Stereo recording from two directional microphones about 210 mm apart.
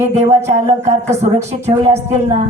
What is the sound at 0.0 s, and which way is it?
A woman's voice, 30° right (ahead or behind).